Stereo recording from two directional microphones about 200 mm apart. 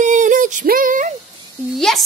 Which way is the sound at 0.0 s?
40° right (ahead or behind).